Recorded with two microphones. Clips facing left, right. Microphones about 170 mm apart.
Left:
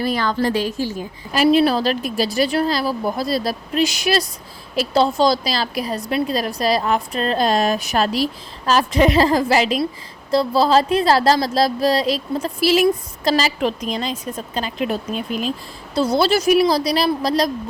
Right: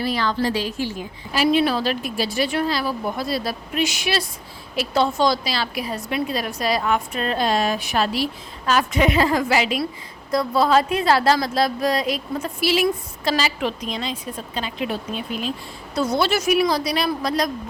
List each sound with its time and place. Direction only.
0.0 s a woman's voice: 45° left (ahead or behind)
16.0 s a woman's voice: 30° left (ahead or behind)